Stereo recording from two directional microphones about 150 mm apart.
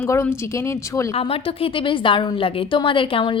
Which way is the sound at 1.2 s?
35° left (ahead or behind).